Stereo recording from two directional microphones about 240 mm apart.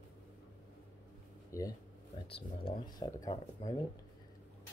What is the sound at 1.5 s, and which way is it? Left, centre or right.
Speech, centre.